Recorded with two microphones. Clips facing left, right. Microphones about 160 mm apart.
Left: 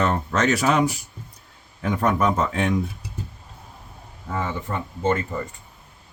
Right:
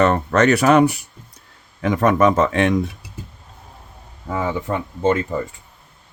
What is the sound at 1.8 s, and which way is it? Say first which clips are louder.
Speech: right 6 dB; 90° right.